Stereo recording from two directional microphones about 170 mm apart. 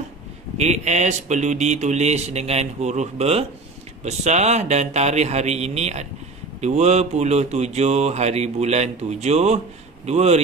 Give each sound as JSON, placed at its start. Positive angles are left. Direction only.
{"t": 0.6, "sound": "mantra", "side_deg": -40}